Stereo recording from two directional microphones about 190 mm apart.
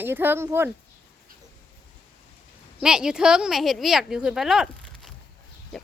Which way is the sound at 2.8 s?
5° right (ahead or behind).